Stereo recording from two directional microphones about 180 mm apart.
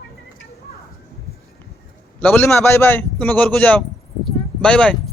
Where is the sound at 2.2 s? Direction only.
10° left (ahead or behind).